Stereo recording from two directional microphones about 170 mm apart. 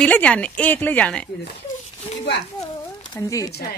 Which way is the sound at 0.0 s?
5° left (ahead or behind).